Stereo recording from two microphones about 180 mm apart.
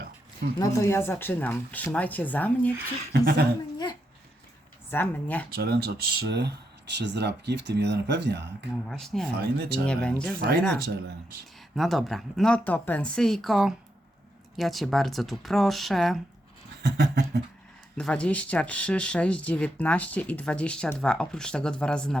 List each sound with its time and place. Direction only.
0.6 s speech: 15° left (ahead or behind)
3.1 s a sound: 55° right (ahead or behind)
4.9 s speech: 10° left (ahead or behind)
5.5 s speech: 65° right (ahead or behind)
8.7 s a woman's voice: centre (ahead or behind)
9.4 s a sound: 60° right (ahead or behind)
9.8 s a woman's voice: 5° left (ahead or behind)
11.8 s a woman's voice: centre (ahead or behind)
16.8 s a sound: 65° right (ahead or behind)
17.9 s speech: 5° left (ahead or behind)